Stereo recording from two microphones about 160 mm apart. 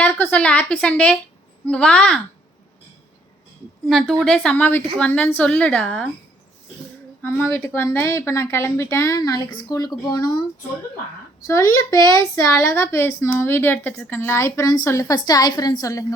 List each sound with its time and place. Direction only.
0.0 s a woman's voice: 10° left (ahead or behind)
3.8 s a woman's voice: centre (ahead or behind)
7.2 s a woman's voice: 10° left (ahead or behind)
11.4 s a woman's voice: 20° left (ahead or behind)